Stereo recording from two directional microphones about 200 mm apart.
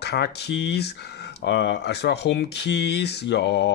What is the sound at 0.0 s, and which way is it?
Speech, 55° left (ahead or behind).